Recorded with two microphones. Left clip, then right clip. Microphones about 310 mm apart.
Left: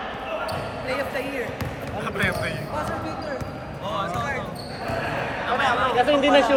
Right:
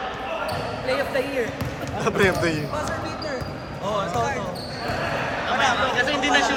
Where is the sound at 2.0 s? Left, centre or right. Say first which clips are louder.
Right 5 dB; centre.